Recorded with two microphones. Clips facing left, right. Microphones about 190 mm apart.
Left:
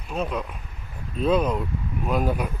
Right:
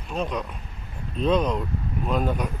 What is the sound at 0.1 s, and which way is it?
Speech, 5° left (ahead or behind).